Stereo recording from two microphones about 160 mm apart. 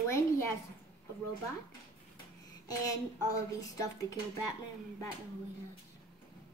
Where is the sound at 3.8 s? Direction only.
20° left (ahead or behind).